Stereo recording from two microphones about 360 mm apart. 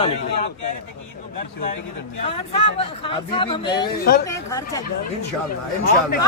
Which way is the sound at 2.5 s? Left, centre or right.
Centre.